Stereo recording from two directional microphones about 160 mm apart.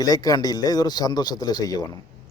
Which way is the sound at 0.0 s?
25° left (ahead or behind).